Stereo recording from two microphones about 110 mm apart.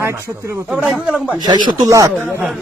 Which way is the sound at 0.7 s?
5° right (ahead or behind).